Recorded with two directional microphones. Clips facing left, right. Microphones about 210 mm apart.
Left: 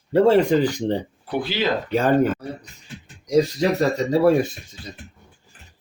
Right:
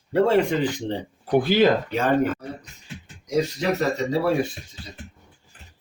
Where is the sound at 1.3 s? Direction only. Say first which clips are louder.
Right 6 dB; 50° right (ahead or behind).